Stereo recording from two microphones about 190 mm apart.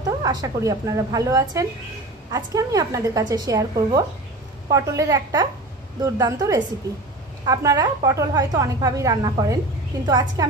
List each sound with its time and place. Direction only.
0.2 s a woman's voice: 20° right (ahead or behind)